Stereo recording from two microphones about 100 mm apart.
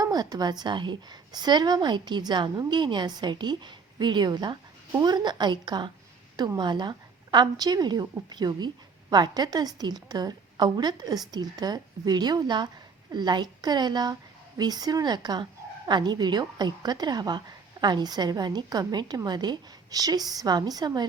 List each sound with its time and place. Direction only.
0.0 s a woman's voice: 40° right (ahead or behind)